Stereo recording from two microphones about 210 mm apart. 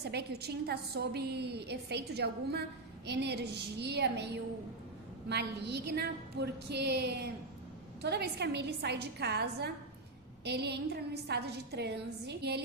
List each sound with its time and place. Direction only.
0.0 s a woman's voice: 50° right (ahead or behind)
5.3 s a woman's voice: 55° right (ahead or behind)